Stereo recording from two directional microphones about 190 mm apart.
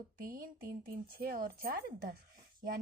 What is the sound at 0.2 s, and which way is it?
A woman's voice, 50° right (ahead or behind).